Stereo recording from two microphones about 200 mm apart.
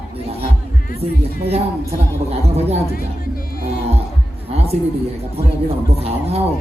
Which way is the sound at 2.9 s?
45° left (ahead or behind).